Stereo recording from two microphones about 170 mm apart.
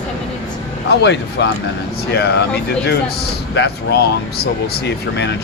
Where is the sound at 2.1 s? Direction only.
75° left (ahead or behind).